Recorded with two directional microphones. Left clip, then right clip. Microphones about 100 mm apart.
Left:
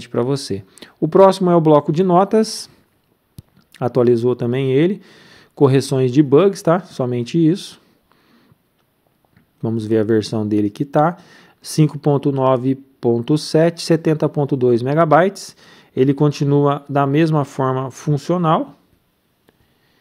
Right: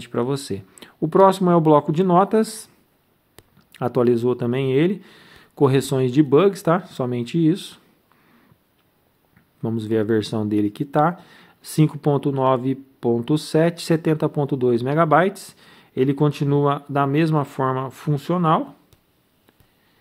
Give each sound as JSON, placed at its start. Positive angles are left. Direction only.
{"t": 0.0, "sound": "speech", "side_deg": 35}
{"t": 3.5, "sound": "speech", "side_deg": 35}
{"t": 9.6, "sound": "speech", "side_deg": 30}